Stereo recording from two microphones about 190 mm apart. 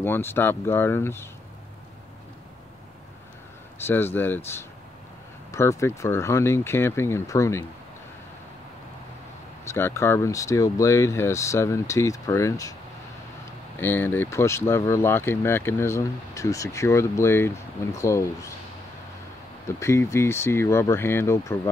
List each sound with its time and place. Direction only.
0.0 s speech: 10° left (ahead or behind)
3.8 s speech: 10° left (ahead or behind)
9.7 s speech: 15° left (ahead or behind)
13.7 s speech: 10° left (ahead or behind)
19.8 s speech: 15° left (ahead or behind)